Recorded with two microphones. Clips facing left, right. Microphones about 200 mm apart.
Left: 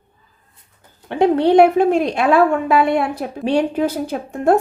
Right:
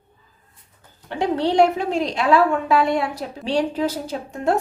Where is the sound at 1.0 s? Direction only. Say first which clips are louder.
Left 7 dB; 55° left (ahead or behind).